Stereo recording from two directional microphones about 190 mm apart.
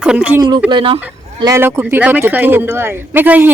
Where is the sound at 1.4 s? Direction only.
15° right (ahead or behind).